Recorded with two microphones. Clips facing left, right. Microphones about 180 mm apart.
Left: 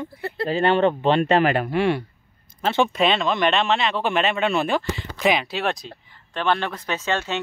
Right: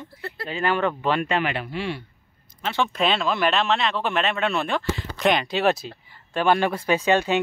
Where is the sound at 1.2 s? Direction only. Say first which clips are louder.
Left 6 dB; 40° left (ahead or behind); by 2.1 s 60° left (ahead or behind).